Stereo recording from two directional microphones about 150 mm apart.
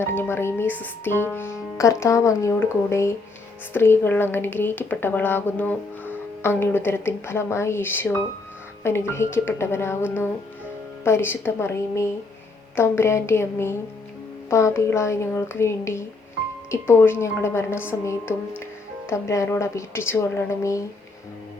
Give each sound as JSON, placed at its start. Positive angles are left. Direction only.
{"t": 0.0, "sound": "speech", "side_deg": 15}